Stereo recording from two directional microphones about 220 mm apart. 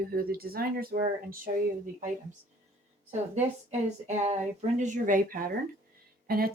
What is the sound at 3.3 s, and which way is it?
Speech, 30° right (ahead or behind).